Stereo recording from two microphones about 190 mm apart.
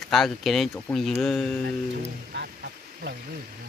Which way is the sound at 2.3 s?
65° right (ahead or behind).